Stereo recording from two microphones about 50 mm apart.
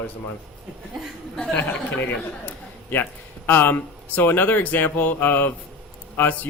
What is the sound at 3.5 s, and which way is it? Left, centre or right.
Speech, left.